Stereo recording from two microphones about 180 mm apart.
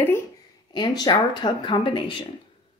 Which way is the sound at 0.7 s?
20° left (ahead or behind).